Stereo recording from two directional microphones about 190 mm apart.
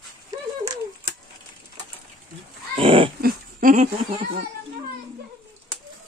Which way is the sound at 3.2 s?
45° right (ahead or behind).